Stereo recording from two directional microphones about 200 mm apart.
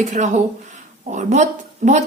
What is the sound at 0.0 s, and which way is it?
Speech, 35° right (ahead or behind).